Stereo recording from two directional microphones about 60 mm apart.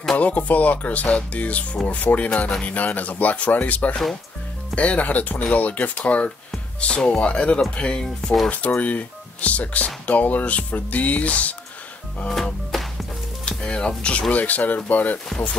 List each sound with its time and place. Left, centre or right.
0.2 s speech: left
8.5 s speech: left
12.7 s music: centre
13.5 s sizzle: centre
14.3 s speech: left